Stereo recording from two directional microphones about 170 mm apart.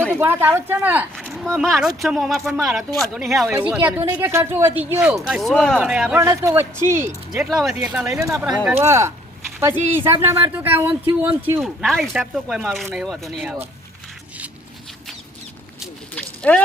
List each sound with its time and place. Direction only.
0.2 s speech: 15° right (ahead or behind)
3.5 s speech: 10° right (ahead or behind)
6.2 s speech: 15° right (ahead or behind)
7.3 s speech: centre (ahead or behind)
8.7 s speech: 15° right (ahead or behind)
11.6 s speech: centre (ahead or behind)
15.8 s a sound: 5° left (ahead or behind)